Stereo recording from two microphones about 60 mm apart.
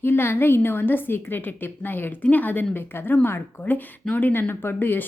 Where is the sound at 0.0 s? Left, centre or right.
Left.